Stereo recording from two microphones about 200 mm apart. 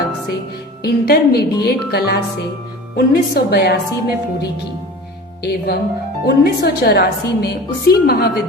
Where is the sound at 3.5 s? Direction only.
50° left (ahead or behind).